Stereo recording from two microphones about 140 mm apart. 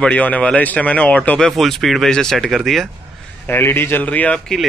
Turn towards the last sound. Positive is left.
turn(degrees=10)  # may be behind; listen again after turning